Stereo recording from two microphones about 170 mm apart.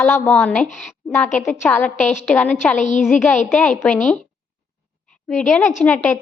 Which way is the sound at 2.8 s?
45° left (ahead or behind).